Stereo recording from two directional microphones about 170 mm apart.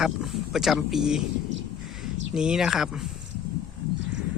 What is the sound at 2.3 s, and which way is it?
Speech, 5° right (ahead or behind).